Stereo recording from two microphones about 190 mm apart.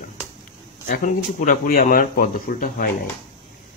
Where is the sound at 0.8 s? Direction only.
45° left (ahead or behind).